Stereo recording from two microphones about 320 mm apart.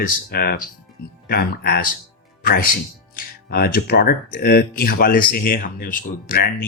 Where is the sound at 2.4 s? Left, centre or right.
Left.